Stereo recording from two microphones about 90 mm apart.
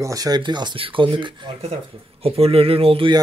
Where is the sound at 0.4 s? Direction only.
55° right (ahead or behind).